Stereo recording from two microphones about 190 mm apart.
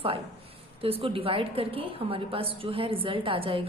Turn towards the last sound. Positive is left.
turn(degrees=-30)  # may be behind; listen again after turning